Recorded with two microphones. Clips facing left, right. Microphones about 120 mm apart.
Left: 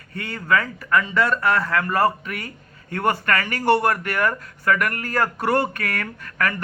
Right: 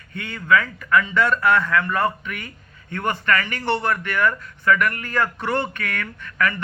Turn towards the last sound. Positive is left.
turn(degrees=40)  # may be behind; listen again after turning